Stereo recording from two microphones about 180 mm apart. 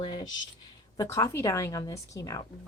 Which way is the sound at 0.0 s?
25° left (ahead or behind).